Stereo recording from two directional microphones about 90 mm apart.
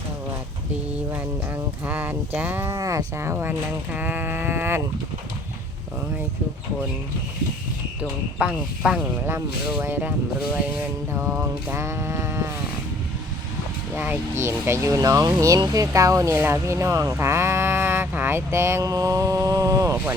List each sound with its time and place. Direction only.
1.9 s speech: 20° right (ahead or behind)
2.7 s speech: 35° right (ahead or behind)
8.4 s speech: 10° right (ahead or behind)
9.8 s speech: 25° right (ahead or behind)
11.1 s speech: 25° right (ahead or behind)
13.9 s speech: 20° right (ahead or behind); by 16.3 s 40° right (ahead or behind)
16.3 s speech: 25° right (ahead or behind)
17.1 s a sound: 30° right (ahead or behind)